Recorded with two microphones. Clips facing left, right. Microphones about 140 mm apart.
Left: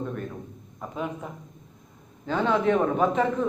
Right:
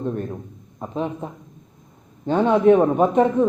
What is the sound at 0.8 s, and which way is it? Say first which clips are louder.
A man's voice: right 6 dB; 25° right (ahead or behind).